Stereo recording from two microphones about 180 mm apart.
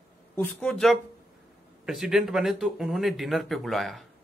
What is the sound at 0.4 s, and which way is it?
Speech, 5° left (ahead or behind).